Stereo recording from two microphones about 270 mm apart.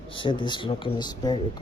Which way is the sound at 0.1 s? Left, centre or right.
Centre.